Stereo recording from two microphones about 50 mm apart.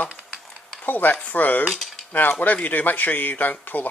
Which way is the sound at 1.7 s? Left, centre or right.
Centre.